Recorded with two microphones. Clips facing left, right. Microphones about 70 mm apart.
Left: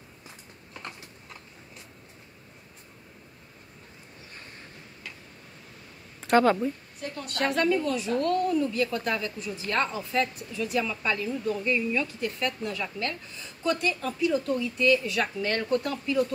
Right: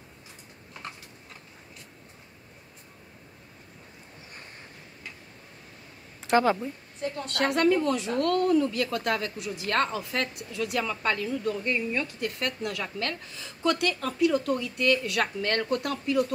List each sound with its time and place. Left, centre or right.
6.2 s speech: centre
7.2 s speech: right